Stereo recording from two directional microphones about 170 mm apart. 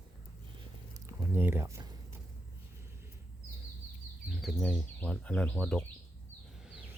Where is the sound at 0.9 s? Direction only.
15° right (ahead or behind).